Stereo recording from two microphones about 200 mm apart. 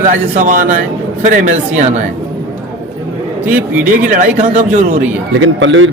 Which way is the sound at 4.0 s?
40° right (ahead or behind).